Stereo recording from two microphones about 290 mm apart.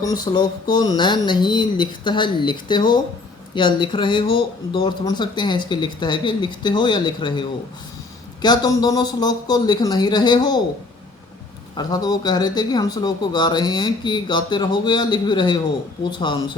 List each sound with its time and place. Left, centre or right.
0.0 s speech: centre
11.8 s speech: centre